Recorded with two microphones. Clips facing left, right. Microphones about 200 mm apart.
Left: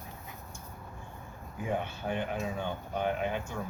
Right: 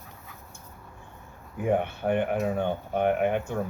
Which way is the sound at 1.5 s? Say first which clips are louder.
Right 8 dB; 60° right (ahead or behind).